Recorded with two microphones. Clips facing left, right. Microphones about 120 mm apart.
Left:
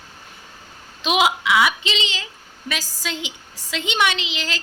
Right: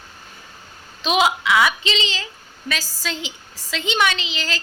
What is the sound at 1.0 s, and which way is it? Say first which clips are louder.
A woman's voice: even; 15° left (ahead or behind).